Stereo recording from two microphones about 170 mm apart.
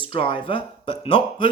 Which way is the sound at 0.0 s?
30° left (ahead or behind).